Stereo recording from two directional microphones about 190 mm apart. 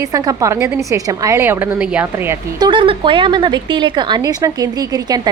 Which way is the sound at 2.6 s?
25° right (ahead or behind).